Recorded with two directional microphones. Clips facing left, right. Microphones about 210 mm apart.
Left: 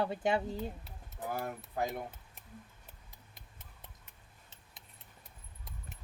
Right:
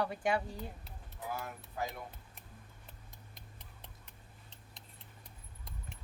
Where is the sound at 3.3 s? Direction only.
Centre (ahead or behind).